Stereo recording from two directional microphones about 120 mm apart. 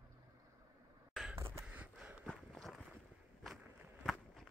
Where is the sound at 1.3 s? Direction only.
25° right (ahead or behind).